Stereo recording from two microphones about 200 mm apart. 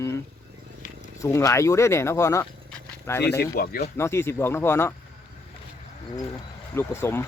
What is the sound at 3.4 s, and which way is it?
Speech, 50° left (ahead or behind).